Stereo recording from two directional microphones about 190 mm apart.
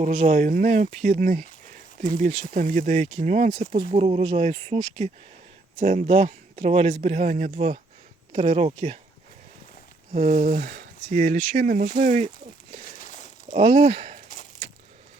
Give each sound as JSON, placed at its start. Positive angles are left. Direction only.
{"t": 0.0, "sound": "a man's voice", "side_deg": -35}
{"t": 10.1, "sound": "a man's voice", "side_deg": -45}
{"t": 13.0, "sound": "a sound", "side_deg": 40}
{"t": 13.5, "sound": "a man's voice", "side_deg": -35}